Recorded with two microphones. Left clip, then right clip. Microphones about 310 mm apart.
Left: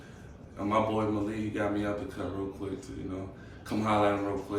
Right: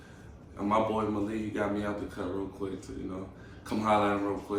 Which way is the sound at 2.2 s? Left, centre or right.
Centre.